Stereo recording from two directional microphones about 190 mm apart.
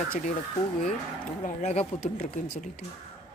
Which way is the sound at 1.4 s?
40° left (ahead or behind).